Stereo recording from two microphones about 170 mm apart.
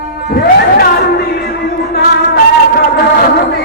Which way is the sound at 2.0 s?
65° left (ahead or behind).